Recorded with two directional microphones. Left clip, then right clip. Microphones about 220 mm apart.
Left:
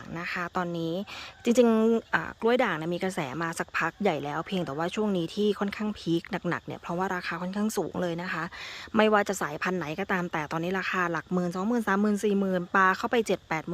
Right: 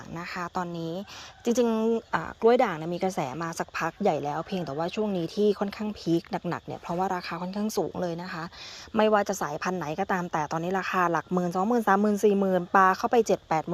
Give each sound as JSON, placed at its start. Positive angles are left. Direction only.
{"t": 0.2, "sound": "speech", "side_deg": 10}
{"t": 2.1, "sound": "speech", "side_deg": 5}
{"t": 11.3, "sound": "speech", "side_deg": 15}
{"t": 12.2, "sound": "speech", "side_deg": 5}